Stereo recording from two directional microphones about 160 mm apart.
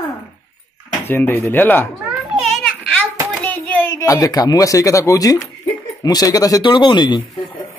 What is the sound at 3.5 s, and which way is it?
Speech, 15° left (ahead or behind).